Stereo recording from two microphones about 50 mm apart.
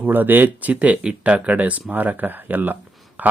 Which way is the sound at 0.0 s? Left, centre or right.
Right.